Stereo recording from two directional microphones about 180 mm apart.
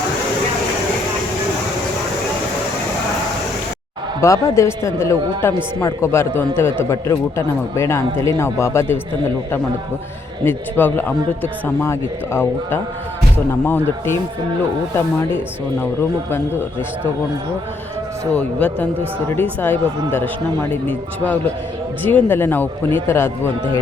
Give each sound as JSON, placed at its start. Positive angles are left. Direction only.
{"t": 4.2, "sound": "a man's voice", "side_deg": 15}
{"t": 10.4, "sound": "a man's voice", "side_deg": 10}
{"t": 18.3, "sound": "a man's voice", "side_deg": 10}
{"t": 22.0, "sound": "a man's voice", "side_deg": 10}